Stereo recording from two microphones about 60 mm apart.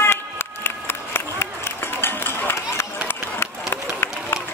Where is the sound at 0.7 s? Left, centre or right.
Left.